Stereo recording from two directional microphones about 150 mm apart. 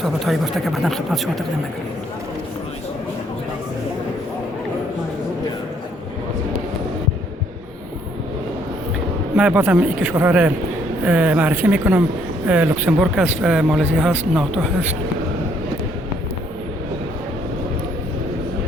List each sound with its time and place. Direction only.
0.0 s speech: centre (ahead or behind)
9.3 s speech: 5° right (ahead or behind)